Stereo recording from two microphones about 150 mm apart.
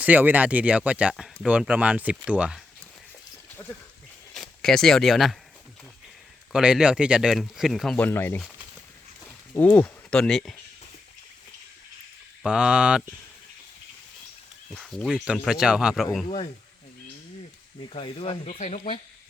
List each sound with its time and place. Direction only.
0.0 s speech: 10° right (ahead or behind)
3.5 s a sound: 15° left (ahead or behind)
4.4 s speech: 5° left (ahead or behind)
6.5 s speech: 5° right (ahead or behind)
7.9 s speech: 15° left (ahead or behind)
12.4 s speech: 5° right (ahead or behind)
14.7 s speech: 5° left (ahead or behind)
17.8 s speech: 40° left (ahead or behind)
18.5 s speech: 50° left (ahead or behind)